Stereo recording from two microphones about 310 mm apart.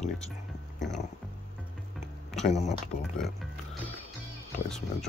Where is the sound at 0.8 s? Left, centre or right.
Centre.